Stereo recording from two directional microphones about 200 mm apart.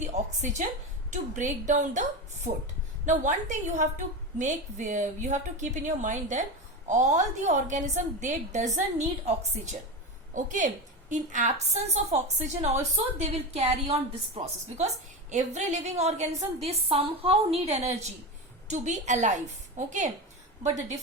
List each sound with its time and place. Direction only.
0.0 s a woman's voice: 35° right (ahead or behind)
10.3 s a woman's voice: 40° right (ahead or behind)